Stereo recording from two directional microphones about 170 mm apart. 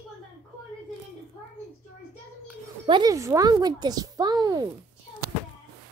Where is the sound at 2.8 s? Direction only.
25° right (ahead or behind).